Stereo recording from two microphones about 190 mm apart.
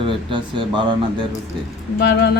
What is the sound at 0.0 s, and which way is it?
Speech, 25° right (ahead or behind).